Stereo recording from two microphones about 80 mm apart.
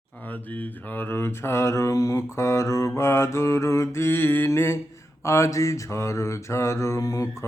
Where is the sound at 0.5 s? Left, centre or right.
Left.